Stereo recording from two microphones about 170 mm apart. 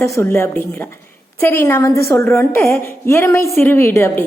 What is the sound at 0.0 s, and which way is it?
A woman's voice, 15° left (ahead or behind).